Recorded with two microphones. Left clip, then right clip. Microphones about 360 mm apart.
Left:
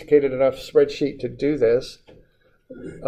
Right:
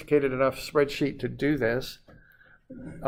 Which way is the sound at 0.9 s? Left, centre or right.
Right.